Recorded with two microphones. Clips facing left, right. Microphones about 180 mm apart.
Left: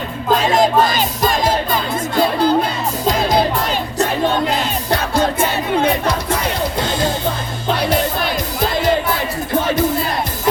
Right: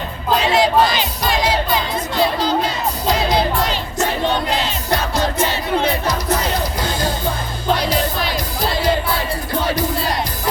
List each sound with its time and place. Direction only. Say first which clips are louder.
0.3 s music: even; 45° left (ahead or behind)